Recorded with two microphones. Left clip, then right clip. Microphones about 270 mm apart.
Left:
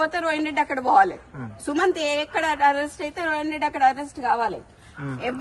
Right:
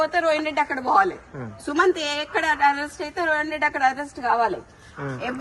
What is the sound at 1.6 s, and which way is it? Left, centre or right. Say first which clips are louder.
Speech: right 2 dB; centre.